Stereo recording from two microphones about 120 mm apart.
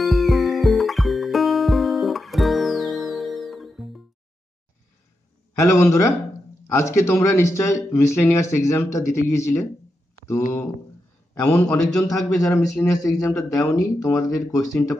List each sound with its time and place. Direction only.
0.0 s music: centre (ahead or behind)
5.6 s a man's voice: 25° left (ahead or behind)
11.3 s a man's voice: 10° left (ahead or behind)
12.0 s speech: 25° left (ahead or behind)